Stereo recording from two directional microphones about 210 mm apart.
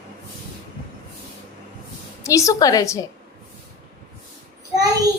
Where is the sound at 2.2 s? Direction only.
15° left (ahead or behind).